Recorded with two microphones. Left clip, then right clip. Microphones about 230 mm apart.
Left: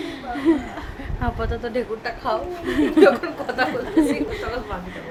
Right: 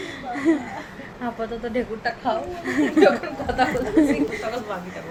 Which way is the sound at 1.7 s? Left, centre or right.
Left.